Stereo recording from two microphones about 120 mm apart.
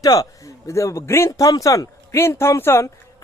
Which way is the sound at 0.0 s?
30° left (ahead or behind).